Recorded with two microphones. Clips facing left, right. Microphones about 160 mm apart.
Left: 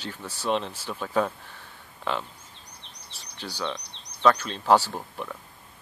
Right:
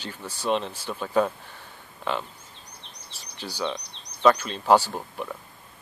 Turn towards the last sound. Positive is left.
turn(degrees=-5)  # may be behind; listen again after turning